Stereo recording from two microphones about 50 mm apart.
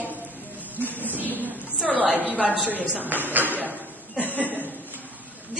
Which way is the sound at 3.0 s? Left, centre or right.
Right.